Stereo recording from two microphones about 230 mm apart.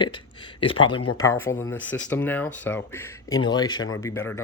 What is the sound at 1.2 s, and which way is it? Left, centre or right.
Speech, centre.